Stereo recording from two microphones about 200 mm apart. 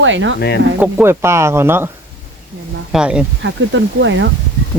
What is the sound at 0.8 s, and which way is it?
Speech, 10° right (ahead or behind).